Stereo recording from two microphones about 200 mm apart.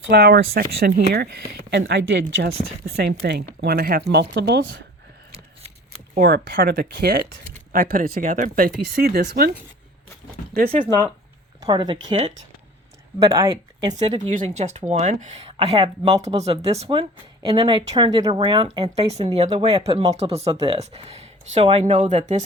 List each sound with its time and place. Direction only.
0.1 s speech: 50° right (ahead or behind); by 2.6 s 70° right (ahead or behind)
2.8 s speech: 55° right (ahead or behind)
6.1 s speech: 50° right (ahead or behind)
11.6 s speech: 20° right (ahead or behind)
13.9 s speech: 35° right (ahead or behind); by 20.1 s 20° right (ahead or behind)
20.1 s speech: 30° right (ahead or behind)